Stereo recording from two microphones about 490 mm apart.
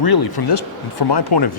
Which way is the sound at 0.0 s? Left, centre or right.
Left.